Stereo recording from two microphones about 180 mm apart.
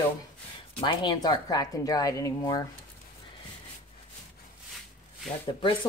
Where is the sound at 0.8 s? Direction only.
25° left (ahead or behind).